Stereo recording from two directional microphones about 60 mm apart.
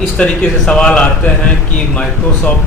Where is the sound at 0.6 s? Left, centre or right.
Centre.